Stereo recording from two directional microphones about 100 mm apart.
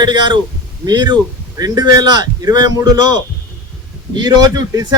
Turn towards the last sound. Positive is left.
turn(degrees=-40)  # may be behind; listen again after turning